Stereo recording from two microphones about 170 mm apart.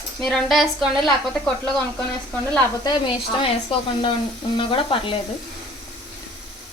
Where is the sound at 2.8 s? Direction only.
25° left (ahead or behind).